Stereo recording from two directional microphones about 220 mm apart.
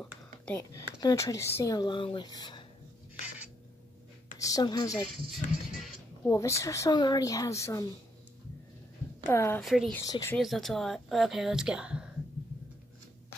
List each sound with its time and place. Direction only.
0.5 s speech: 15° left (ahead or behind)
4.4 s speech: 15° left (ahead or behind)
5.0 s speech: centre (ahead or behind)
6.2 s speech: 15° left (ahead or behind)
9.3 s speech: 10° left (ahead or behind)
9.6 s speech: centre (ahead or behind)
9.9 s speech: 15° left (ahead or behind)
10.3 s speech: centre (ahead or behind)